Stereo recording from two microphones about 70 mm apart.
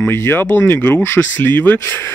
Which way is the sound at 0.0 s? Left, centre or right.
Left.